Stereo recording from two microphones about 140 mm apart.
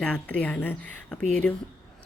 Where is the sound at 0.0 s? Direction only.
5° left (ahead or behind).